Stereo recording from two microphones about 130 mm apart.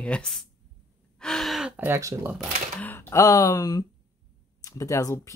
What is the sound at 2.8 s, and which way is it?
Speech, 15° left (ahead or behind).